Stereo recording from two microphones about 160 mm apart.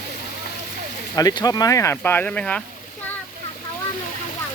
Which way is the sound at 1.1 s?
25° left (ahead or behind).